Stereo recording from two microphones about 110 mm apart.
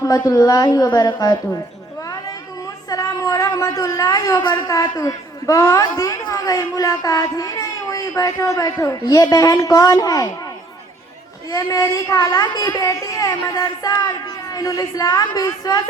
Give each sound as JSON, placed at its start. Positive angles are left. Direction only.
{"t": 0.0, "sound": "a woman's voice", "side_deg": 30}
{"t": 2.9, "sound": "a woman's voice", "side_deg": 35}
{"t": 11.5, "sound": "a woman's voice", "side_deg": 30}